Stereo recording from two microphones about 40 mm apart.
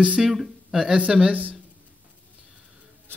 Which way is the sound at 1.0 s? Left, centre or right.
Right.